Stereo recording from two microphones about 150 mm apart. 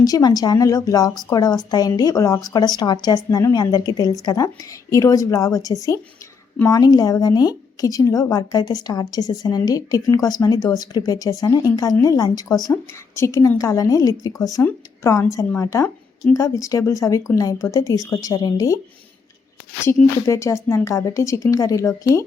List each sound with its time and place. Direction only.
0.0 s a woman's voice: 25° left (ahead or behind)
19.8 s a woman's voice: 20° left (ahead or behind)